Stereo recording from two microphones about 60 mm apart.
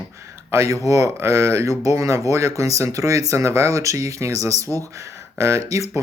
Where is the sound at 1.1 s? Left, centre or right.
Right.